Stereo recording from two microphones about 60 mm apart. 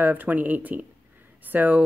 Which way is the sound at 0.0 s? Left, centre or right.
Right.